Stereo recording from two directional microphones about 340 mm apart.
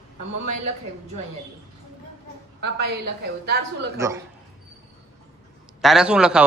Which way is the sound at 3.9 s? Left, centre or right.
Centre.